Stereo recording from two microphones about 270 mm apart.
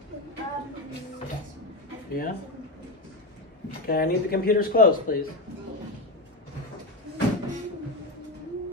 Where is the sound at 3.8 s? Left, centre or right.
Left.